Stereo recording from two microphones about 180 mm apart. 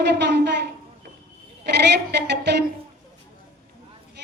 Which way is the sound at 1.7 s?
70° right (ahead or behind).